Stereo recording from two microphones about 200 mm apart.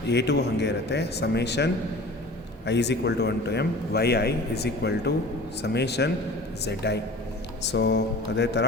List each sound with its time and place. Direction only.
0.1 s a man's voice: 60° left (ahead or behind)